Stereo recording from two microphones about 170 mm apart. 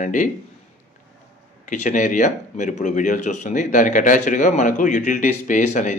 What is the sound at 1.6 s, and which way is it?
Speech, 45° left (ahead or behind).